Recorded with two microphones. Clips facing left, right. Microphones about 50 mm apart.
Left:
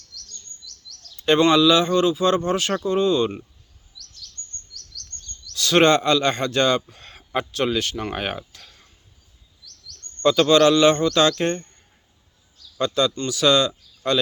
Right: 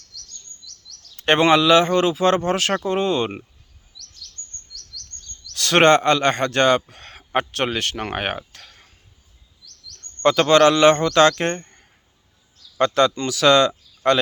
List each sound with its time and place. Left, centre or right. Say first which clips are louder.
1.1 s speech: right 1 dB; right
5.5 s a man's voice: right 2 dB; right
10.2 s a man's voice: right 1 dB; right
12.8 s speech: right 4 dB; right